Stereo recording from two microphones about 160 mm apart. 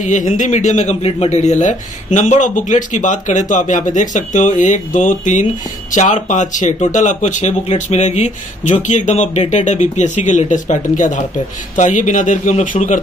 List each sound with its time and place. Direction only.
0.0 s speech: 50° left (ahead or behind)